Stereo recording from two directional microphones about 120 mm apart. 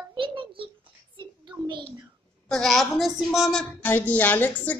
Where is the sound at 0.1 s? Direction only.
45° right (ahead or behind).